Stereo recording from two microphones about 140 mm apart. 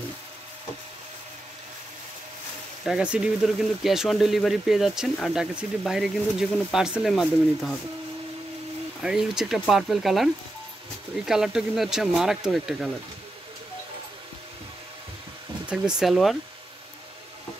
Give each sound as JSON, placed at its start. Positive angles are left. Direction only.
{"t": 2.8, "sound": "speech", "side_deg": -5}
{"t": 9.0, "sound": "speech", "side_deg": -5}
{"t": 15.6, "sound": "speech", "side_deg": -5}